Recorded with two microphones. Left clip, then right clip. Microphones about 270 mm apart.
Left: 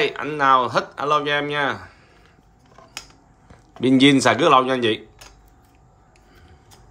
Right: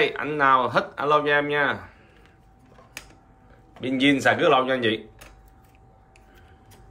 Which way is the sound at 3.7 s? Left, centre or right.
Centre.